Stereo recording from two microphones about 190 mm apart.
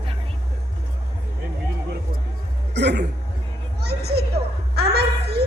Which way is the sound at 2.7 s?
65° right (ahead or behind).